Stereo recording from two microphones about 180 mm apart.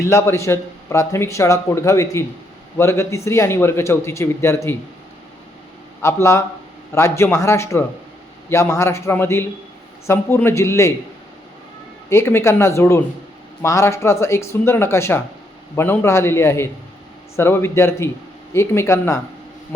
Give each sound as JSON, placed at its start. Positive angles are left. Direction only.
{"t": 0.0, "sound": "a man's voice", "side_deg": 15}
{"t": 6.0, "sound": "a man's voice", "side_deg": 15}
{"t": 12.0, "sound": "a man's voice", "side_deg": 15}